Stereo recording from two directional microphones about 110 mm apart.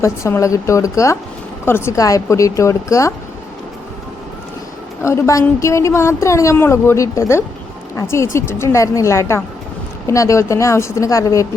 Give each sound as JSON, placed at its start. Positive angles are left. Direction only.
{"t": 0.0, "sound": "a woman's voice", "side_deg": 25}
{"t": 5.0, "sound": "a woman's voice", "side_deg": 25}